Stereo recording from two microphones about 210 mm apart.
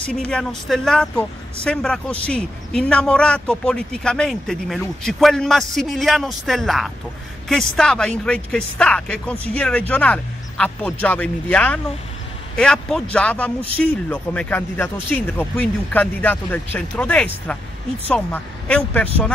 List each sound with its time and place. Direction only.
0.3 s speech: centre (ahead or behind)